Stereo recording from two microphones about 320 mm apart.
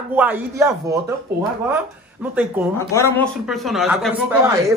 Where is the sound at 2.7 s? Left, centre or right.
Centre.